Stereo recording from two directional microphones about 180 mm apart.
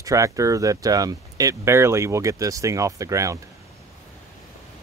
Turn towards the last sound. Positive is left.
turn(degrees=-15)  # may be behind; listen again after turning